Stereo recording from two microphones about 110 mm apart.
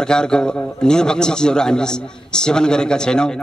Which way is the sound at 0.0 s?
5° left (ahead or behind).